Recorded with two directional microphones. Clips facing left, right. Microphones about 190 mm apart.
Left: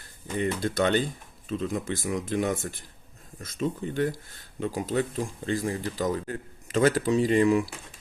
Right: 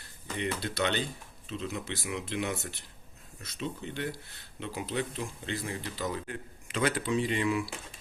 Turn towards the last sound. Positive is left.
turn(degrees=40)  # may be behind; listen again after turning